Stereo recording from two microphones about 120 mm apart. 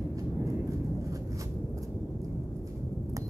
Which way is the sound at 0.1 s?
25° right (ahead or behind).